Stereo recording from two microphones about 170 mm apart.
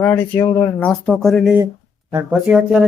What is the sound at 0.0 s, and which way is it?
Speech, 15° left (ahead or behind).